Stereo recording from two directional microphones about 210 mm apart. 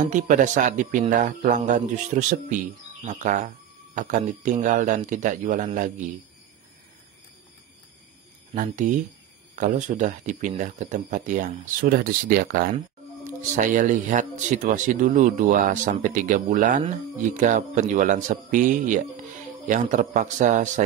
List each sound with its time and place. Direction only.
0.0 s speech: 35° right (ahead or behind)
8.5 s speech: 35° right (ahead or behind)